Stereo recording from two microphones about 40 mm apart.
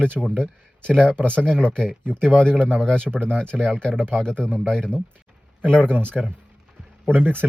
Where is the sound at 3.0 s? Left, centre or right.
Right.